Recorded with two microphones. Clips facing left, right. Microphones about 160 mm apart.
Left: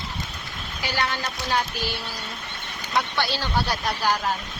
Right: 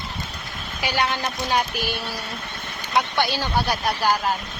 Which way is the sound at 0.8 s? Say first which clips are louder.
Right 3 dB; 15° right (ahead or behind).